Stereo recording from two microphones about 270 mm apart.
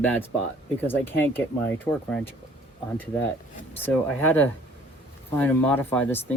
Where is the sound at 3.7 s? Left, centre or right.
Centre.